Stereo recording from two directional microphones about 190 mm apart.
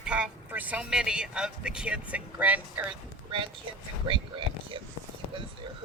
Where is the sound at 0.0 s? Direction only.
5° right (ahead or behind).